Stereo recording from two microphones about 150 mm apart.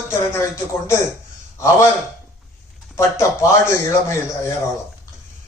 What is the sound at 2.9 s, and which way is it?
A man's voice, 20° left (ahead or behind).